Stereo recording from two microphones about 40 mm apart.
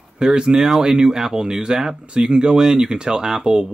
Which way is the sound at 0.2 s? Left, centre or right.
Centre.